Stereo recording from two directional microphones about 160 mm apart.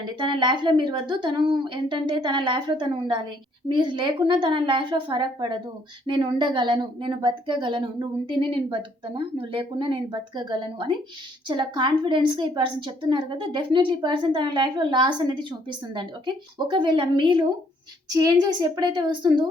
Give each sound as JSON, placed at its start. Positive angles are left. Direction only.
{"t": 0.2, "sound": "a woman's voice", "side_deg": -30}